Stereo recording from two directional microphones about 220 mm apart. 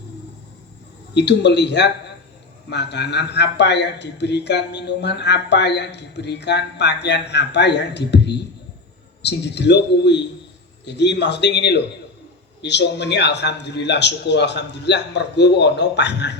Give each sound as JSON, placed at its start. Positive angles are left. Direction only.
{"t": 1.1, "sound": "speech", "side_deg": 50}